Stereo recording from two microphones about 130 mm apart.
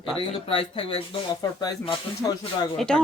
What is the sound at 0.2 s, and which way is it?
Speech, 45° left (ahead or behind).